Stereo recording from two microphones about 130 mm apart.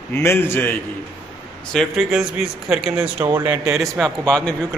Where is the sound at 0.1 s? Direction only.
20° left (ahead or behind).